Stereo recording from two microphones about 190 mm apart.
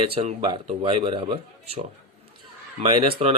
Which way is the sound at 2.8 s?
30° right (ahead or behind).